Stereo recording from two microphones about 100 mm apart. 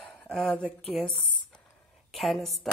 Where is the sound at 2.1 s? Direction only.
Centre (ahead or behind).